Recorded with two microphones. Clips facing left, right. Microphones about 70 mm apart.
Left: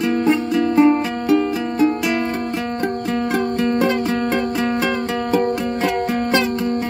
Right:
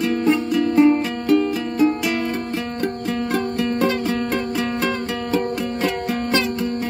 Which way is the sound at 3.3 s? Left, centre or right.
Centre.